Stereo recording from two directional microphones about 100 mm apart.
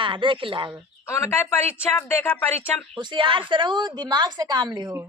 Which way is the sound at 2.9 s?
50° right (ahead or behind).